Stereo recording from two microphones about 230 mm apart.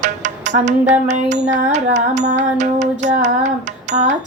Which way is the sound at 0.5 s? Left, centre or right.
Right.